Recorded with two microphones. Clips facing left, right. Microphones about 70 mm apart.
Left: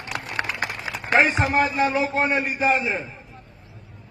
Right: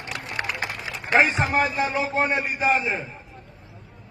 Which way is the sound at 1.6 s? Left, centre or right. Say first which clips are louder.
Left 4 dB; centre.